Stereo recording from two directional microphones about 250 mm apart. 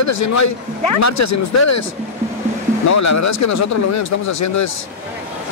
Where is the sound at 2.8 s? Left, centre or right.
Left.